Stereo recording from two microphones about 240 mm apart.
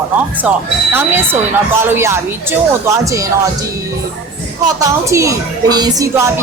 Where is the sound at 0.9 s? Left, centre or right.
Centre.